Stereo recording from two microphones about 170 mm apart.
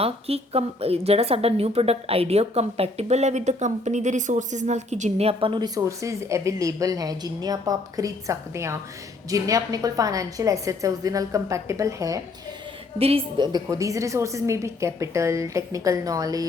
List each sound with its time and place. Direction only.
0.0 s a woman's voice: 35° right (ahead or behind); by 12.2 s 20° right (ahead or behind)
13.0 s a woman's voice: 35° right (ahead or behind)